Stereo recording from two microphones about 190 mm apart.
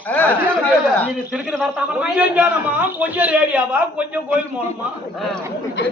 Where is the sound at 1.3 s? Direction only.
Centre (ahead or behind).